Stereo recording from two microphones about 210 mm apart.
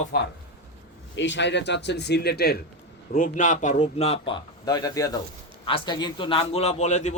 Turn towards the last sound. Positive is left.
turn(degrees=35)  # may be behind; listen again after turning